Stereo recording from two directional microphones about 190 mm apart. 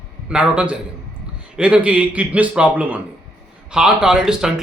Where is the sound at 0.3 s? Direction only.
5° right (ahead or behind).